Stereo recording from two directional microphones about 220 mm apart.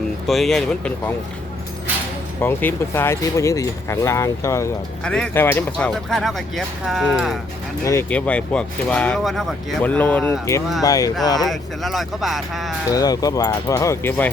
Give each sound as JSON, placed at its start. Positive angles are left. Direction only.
{"t": 0.3, "sound": "speech", "side_deg": 0}
{"t": 2.4, "sound": "speech", "side_deg": 10}
{"t": 7.9, "sound": "speech", "side_deg": 10}
{"t": 11.3, "sound": "speech", "side_deg": 0}
{"t": 12.9, "sound": "speech", "side_deg": 15}